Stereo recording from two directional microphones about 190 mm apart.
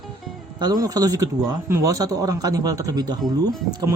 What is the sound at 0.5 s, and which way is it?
Speech, 20° right (ahead or behind).